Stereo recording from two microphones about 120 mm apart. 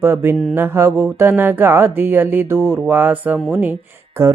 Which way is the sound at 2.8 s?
15° right (ahead or behind).